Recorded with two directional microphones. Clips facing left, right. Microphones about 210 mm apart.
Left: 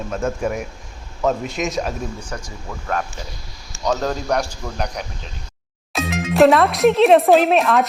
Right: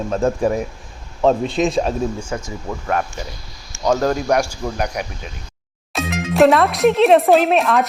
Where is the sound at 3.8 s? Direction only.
5° right (ahead or behind).